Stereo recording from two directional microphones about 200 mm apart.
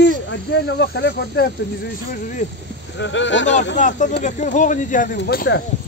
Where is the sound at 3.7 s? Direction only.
40° left (ahead or behind).